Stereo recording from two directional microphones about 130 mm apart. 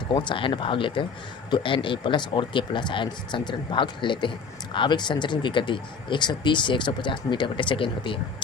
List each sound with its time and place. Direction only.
0.1 s speech: 35° left (ahead or behind)